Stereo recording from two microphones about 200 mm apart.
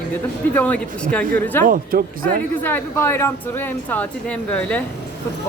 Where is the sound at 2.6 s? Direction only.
10° left (ahead or behind).